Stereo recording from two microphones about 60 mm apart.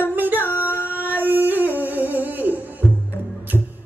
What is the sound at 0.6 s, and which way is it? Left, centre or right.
Singing, left.